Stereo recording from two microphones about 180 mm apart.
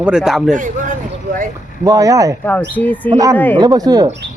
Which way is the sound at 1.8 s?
20° right (ahead or behind).